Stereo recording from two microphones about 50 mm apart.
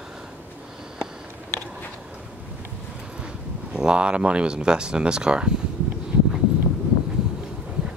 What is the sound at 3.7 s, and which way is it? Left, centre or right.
Speech, centre.